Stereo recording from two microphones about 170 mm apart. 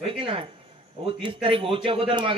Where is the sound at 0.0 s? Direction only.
30° right (ahead or behind).